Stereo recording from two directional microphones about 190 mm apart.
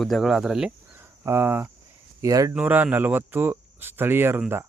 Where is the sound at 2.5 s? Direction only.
5° right (ahead or behind).